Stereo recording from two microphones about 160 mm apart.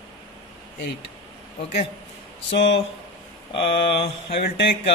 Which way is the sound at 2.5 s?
90° left.